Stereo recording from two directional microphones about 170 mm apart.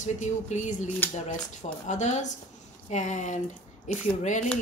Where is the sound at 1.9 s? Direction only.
45° left (ahead or behind).